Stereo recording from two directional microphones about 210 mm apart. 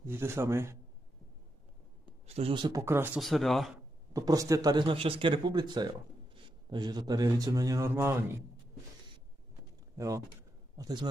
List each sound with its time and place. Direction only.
0.0 s speech: 10° right (ahead or behind)
2.2 s speech: 30° right (ahead or behind); by 3.8 s centre (ahead or behind)
4.1 s speech: 15° right (ahead or behind)
9.9 s speech: 15° right (ahead or behind)